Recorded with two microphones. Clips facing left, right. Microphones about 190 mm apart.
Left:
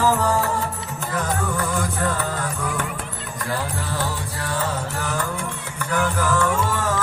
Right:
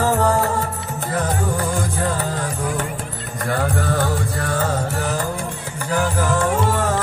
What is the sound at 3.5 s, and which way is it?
Music, 55° right (ahead or behind).